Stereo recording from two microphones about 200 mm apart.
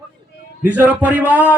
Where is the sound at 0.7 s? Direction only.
10° right (ahead or behind).